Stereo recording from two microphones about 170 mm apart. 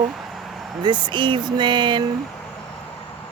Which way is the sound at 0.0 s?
Centre (ahead or behind).